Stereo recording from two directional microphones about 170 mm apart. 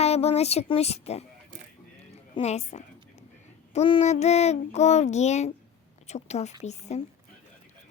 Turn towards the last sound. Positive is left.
turn(degrees=40)  # may be behind; listen again after turning